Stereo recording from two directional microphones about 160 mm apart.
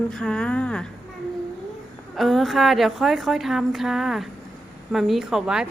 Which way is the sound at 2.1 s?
Centre (ahead or behind).